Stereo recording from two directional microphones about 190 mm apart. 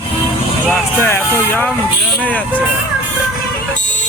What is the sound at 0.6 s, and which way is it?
Speech, 10° left (ahead or behind).